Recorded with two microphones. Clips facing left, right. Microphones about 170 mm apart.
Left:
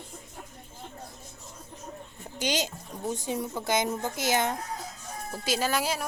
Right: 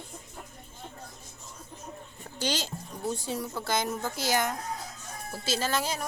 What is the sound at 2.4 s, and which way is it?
A woman's voice, 20° left (ahead or behind).